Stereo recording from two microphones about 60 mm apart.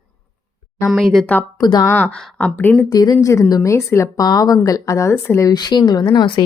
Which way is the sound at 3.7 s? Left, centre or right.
Left.